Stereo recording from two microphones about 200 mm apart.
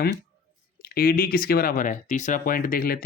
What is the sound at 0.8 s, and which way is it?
Speech, 45° left (ahead or behind).